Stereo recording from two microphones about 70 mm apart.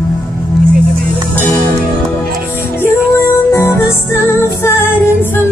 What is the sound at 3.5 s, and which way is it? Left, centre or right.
Music, left.